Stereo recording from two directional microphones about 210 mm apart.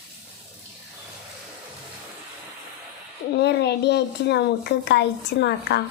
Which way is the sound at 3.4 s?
55° left (ahead or behind).